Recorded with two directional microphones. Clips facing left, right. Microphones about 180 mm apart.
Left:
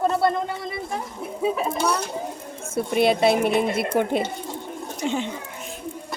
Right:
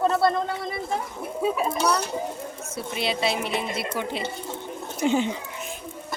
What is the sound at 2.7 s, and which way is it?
Speech, 55° left (ahead or behind).